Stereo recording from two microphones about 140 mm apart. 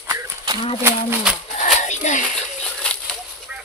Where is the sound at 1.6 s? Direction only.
60° left (ahead or behind).